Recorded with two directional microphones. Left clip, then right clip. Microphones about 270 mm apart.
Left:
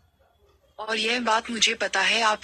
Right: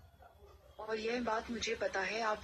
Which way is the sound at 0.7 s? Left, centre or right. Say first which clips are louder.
Left 12 dB; left.